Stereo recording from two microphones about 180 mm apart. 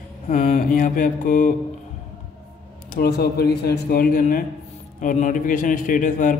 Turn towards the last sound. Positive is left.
turn(degrees=45)  # may be behind; listen again after turning